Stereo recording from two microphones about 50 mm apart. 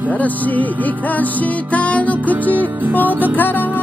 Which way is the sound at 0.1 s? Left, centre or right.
Left.